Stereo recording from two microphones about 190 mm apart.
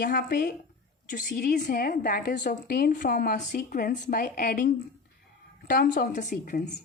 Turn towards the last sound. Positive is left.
turn(degrees=45)  # may be behind; listen again after turning